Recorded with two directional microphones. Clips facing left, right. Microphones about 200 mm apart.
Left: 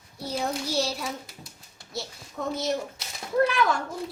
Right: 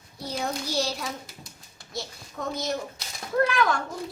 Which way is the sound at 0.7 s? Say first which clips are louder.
Left 1 dB; 5° left (ahead or behind).